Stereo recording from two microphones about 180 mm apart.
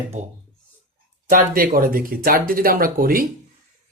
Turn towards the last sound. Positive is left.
turn(degrees=-50)  # may be behind; listen again after turning